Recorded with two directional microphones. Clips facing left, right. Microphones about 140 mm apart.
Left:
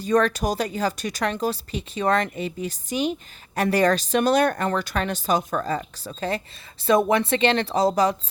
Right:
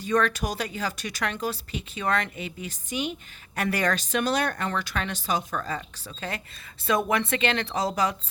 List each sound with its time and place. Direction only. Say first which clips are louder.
0.0 s speech: left 4 dB; 35° left (ahead or behind)